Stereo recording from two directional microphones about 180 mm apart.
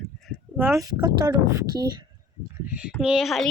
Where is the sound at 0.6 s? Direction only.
15° right (ahead or behind).